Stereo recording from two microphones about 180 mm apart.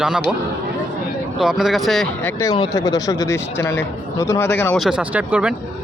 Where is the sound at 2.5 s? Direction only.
25° left (ahead or behind).